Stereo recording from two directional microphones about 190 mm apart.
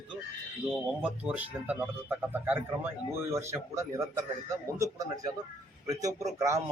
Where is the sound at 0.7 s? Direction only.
5° right (ahead or behind).